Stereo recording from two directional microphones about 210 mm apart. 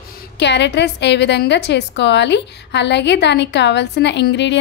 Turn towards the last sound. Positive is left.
turn(degrees=55)  # may be behind; listen again after turning